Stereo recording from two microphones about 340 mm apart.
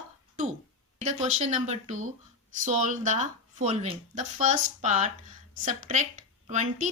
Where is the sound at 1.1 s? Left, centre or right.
Centre.